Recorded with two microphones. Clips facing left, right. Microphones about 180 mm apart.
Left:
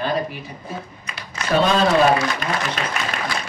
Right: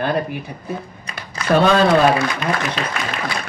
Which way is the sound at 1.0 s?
40° right (ahead or behind).